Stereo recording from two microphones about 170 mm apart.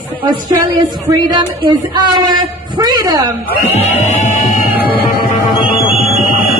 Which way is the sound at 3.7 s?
40° left (ahead or behind).